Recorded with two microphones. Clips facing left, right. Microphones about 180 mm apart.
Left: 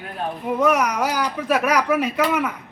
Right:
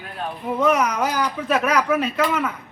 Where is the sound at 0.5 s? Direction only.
10° left (ahead or behind).